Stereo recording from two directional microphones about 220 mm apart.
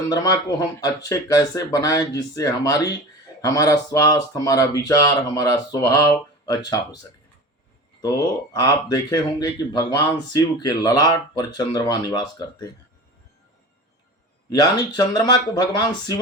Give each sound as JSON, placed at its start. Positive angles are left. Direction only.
{"t": 0.1, "sound": "speech", "side_deg": 15}
{"t": 8.0, "sound": "speech", "side_deg": 15}
{"t": 14.5, "sound": "speech", "side_deg": 20}